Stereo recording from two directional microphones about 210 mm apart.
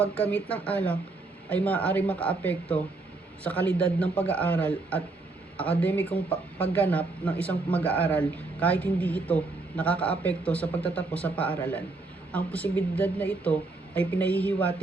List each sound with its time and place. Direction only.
0.0 s a man's voice: 5° left (ahead or behind)